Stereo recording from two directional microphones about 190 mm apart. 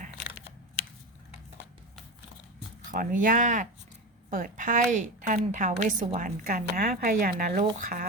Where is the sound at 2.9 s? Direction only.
45° right (ahead or behind).